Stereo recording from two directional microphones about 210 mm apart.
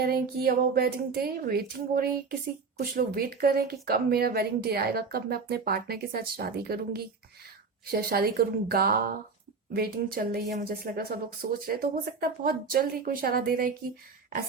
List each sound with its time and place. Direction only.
0.0 s speech: 45° right (ahead or behind)